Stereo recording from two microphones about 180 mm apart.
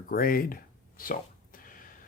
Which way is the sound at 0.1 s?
55° left (ahead or behind).